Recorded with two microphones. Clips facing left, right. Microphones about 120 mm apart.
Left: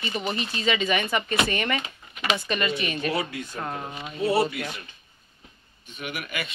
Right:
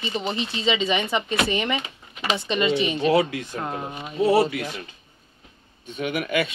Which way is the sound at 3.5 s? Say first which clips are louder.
Right 2 dB; 15° right (ahead or behind).